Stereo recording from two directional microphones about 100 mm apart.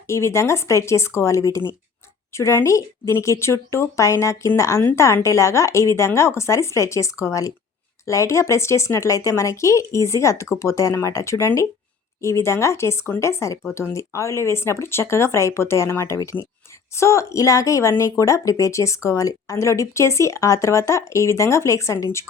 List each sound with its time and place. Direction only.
0.1 s a woman's voice: 30° left (ahead or behind)